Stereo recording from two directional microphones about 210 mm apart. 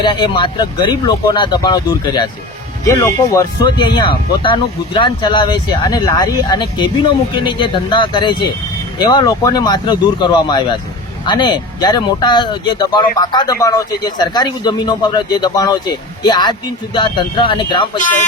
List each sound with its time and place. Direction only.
0.0 s speech: 25° left (ahead or behind)